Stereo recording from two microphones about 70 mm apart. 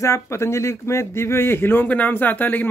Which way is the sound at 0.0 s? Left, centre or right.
Left.